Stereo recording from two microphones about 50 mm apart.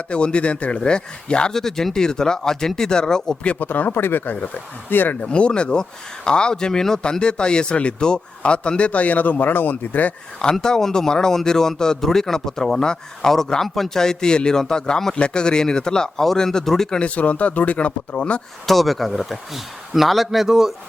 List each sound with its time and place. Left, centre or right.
0.1 s speech: left
3.6 s speech: left
5.2 s speech: left
10.4 s speech: centre
17.0 s speech: left
18.6 s a man's voice: centre